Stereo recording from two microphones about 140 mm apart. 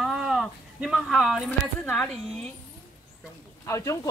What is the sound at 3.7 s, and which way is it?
Speech, 20° left (ahead or behind).